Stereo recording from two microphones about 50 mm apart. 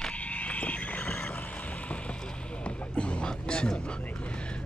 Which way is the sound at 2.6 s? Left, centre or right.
Left.